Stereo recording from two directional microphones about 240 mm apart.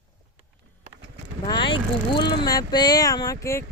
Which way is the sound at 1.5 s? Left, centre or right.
Centre.